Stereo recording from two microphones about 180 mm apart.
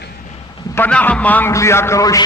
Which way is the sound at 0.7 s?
10° left (ahead or behind).